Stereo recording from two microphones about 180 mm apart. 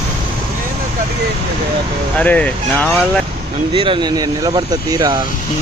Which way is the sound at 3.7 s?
30° right (ahead or behind).